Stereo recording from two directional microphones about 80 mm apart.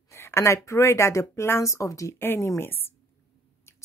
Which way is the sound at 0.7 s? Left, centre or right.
Left.